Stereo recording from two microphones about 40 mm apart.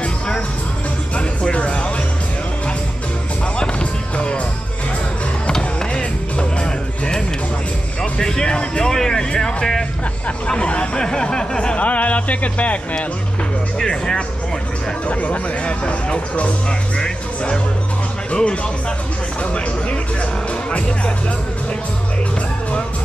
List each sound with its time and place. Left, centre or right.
1.1 s music: left
3.8 s music: left
5.8 s music: left
10.5 s a sound: left
11.8 s speech: left
13.7 s speech: centre
15.0 s speech: left
19.5 s a sound: left